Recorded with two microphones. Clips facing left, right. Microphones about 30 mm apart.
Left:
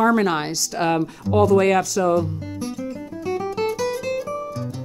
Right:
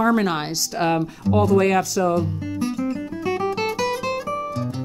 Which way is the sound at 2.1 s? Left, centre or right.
Centre.